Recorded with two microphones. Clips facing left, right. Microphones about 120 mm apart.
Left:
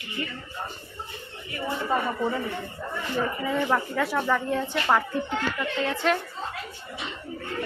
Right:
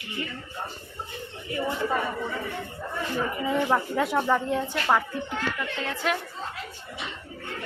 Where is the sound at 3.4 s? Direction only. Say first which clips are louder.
Right 3 dB; 15° right (ahead or behind).